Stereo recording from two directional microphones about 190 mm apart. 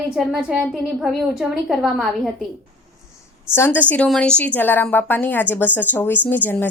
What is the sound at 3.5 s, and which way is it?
Speech, 10° left (ahead or behind).